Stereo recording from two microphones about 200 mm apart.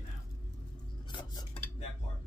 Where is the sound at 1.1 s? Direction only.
20° left (ahead or behind).